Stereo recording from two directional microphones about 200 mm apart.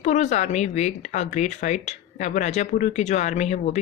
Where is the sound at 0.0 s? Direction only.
35° left (ahead or behind).